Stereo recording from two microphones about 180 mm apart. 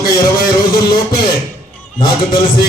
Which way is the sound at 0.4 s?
20° left (ahead or behind).